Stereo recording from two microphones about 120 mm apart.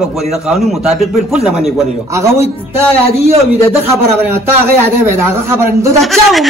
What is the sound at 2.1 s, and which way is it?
Speech, 25° right (ahead or behind).